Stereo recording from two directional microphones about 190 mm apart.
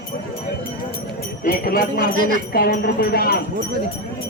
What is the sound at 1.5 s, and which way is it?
Speech, 50° left (ahead or behind).